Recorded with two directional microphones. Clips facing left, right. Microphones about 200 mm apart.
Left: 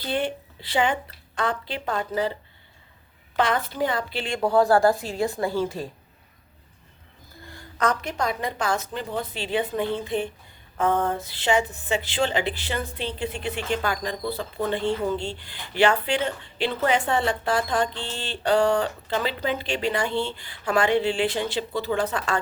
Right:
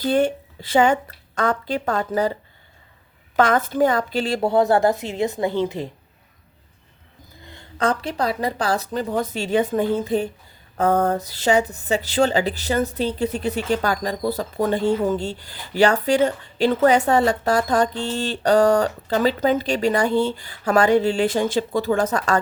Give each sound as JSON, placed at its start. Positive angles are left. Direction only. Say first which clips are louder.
{"t": 0.0, "sound": "a woman's voice", "louder": "right 8 dB", "side_deg": -45}
{"t": 3.3, "sound": "a woman's voice", "louder": "right 6 dB", "side_deg": -45}
{"t": 4.4, "sound": "speech", "louder": "right 1 dB", "side_deg": -20}
{"t": 7.4, "sound": "speech", "louder": "right 3 dB", "side_deg": -25}